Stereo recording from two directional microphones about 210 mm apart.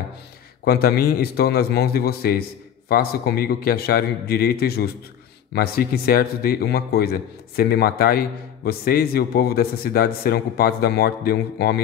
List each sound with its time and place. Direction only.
0.7 s a man's voice: 45° left (ahead or behind)